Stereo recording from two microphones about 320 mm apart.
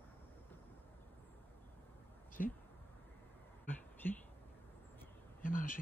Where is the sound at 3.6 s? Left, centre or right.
Centre.